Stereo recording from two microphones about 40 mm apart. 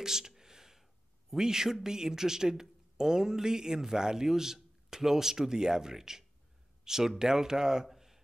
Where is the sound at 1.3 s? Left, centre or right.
Centre.